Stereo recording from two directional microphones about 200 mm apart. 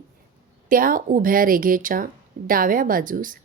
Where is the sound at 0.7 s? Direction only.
45° right (ahead or behind).